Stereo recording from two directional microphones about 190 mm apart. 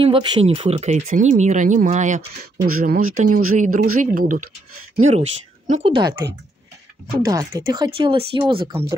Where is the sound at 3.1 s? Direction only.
40° right (ahead or behind).